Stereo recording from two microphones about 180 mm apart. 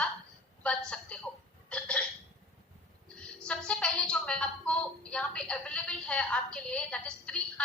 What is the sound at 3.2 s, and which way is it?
A woman's voice, 5° left (ahead or behind).